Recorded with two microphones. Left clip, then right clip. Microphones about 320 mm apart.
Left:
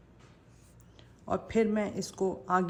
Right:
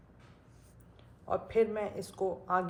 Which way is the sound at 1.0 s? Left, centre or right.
Left.